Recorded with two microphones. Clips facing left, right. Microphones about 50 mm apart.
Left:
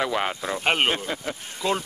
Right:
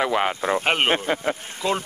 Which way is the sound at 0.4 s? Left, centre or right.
Right.